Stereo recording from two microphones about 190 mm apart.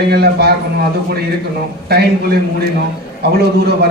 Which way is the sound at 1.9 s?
60° right (ahead or behind).